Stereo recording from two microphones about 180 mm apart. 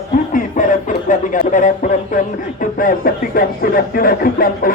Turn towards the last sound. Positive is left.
turn(degrees=50)  # may be behind; listen again after turning